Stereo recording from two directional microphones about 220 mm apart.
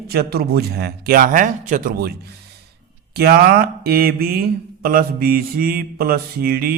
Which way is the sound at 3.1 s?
45° right (ahead or behind).